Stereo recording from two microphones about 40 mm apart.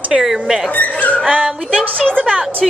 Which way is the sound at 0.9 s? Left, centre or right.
Left.